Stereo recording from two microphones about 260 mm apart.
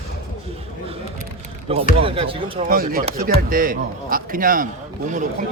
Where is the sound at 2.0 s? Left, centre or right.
Right.